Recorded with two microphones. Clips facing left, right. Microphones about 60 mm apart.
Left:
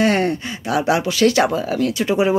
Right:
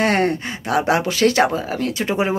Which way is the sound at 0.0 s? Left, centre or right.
Right.